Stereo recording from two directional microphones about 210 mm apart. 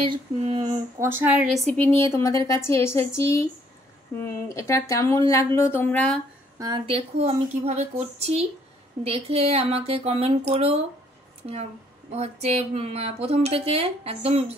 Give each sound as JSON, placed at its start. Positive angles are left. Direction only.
{"t": 0.1, "sound": "speech", "side_deg": -25}
{"t": 1.2, "sound": "a woman's voice", "side_deg": -5}
{"t": 2.0, "sound": "speech", "side_deg": 15}
{"t": 6.6, "sound": "speech", "side_deg": -25}
{"t": 12.1, "sound": "speech", "side_deg": -30}